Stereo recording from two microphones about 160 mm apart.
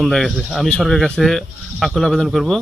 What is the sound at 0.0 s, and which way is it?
Speech, centre (ahead or behind).